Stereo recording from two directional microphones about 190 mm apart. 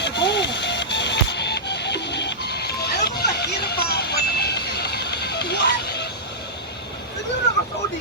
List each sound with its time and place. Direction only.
0.0 s printer: 65° left (ahead or behind)